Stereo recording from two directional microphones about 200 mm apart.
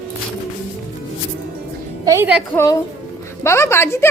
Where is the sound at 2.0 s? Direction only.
10° right (ahead or behind).